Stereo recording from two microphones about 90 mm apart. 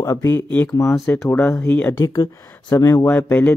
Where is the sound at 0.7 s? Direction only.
40° left (ahead or behind).